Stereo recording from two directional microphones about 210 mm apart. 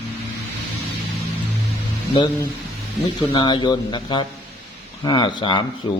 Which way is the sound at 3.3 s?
25° left (ahead or behind).